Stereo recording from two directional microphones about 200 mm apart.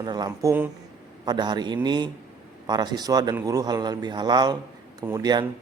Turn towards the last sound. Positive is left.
turn(degrees=-20)  # may be behind; listen again after turning